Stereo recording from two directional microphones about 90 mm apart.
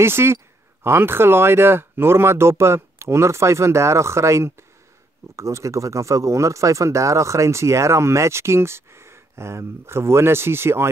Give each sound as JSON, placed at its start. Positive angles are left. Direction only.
{"t": 0.0, "sound": "speech", "side_deg": -30}